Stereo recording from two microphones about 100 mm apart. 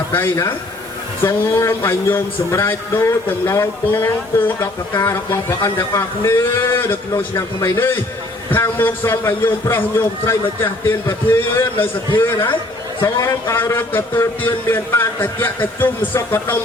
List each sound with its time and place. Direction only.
0.1 s a man's voice: 20° left (ahead or behind)